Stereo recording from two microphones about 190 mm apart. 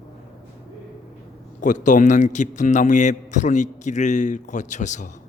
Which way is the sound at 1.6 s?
40° left (ahead or behind).